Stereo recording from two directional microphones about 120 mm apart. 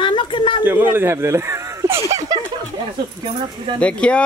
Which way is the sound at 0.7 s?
20° right (ahead or behind).